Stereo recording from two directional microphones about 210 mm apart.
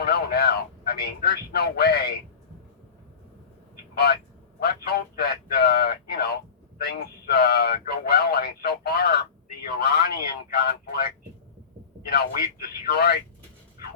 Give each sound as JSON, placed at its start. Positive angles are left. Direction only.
{"t": 0.0, "sound": "speech", "side_deg": 50}
{"t": 3.9, "sound": "speech", "side_deg": 50}